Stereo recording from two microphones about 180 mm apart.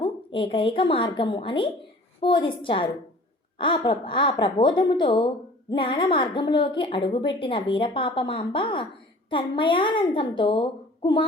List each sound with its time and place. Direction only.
0.3 s a woman's voice: 30° left (ahead or behind)